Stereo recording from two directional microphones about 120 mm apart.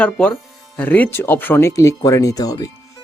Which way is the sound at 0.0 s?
10° left (ahead or behind).